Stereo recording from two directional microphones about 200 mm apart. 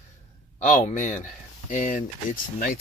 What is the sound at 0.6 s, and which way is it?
Speech, 40° left (ahead or behind).